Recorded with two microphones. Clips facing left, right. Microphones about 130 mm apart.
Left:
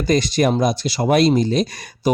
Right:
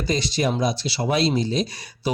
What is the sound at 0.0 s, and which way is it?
Speech, 50° left (ahead or behind).